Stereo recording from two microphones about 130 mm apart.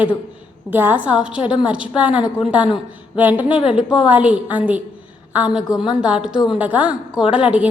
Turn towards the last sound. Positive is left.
turn(degrees=-10)  # may be behind; listen again after turning